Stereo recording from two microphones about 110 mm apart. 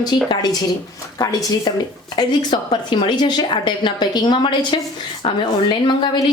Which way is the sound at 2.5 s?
50° left (ahead or behind).